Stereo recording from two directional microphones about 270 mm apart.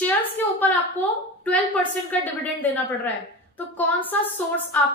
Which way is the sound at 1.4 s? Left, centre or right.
Centre.